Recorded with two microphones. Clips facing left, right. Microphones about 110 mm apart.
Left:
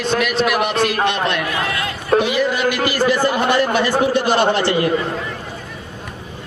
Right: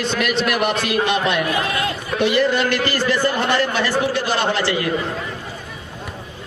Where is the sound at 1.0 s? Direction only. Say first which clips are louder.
Even; centre (ahead or behind); by 4.9 s 20° left (ahead or behind).